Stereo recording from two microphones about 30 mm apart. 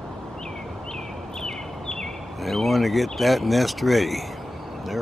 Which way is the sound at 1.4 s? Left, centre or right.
Left.